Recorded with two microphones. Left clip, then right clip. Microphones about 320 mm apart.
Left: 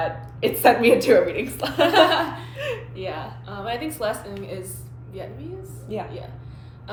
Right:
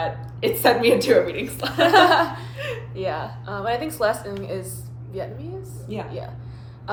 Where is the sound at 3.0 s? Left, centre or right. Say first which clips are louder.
Right 4 dB; centre.